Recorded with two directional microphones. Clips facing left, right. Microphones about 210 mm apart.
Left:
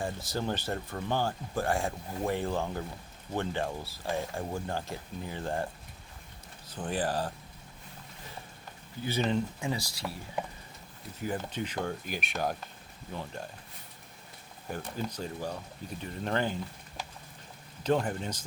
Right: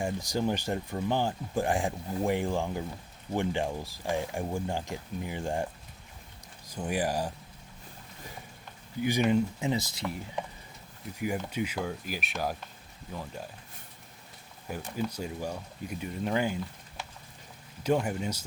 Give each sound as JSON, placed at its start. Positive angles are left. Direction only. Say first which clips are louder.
{"t": 0.0, "sound": "speech", "louder": "right 4 dB", "side_deg": -15}
{"t": 6.7, "sound": "speech", "louder": "right 2 dB", "side_deg": -10}
{"t": 9.0, "sound": "speech", "louder": "right 4 dB", "side_deg": -15}
{"t": 11.2, "sound": "speech", "louder": "right 3 dB", "side_deg": -10}
{"t": 14.7, "sound": "speech", "louder": "right 2 dB", "side_deg": -10}
{"t": 17.8, "sound": "speech", "louder": "right 1 dB", "side_deg": -10}